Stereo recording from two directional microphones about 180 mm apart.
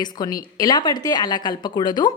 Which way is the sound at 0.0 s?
25° left (ahead or behind).